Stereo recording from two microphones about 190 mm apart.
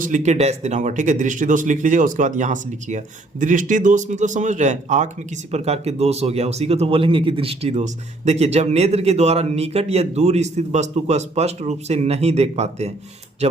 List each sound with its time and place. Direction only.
0.0 s speech: 40° right (ahead or behind)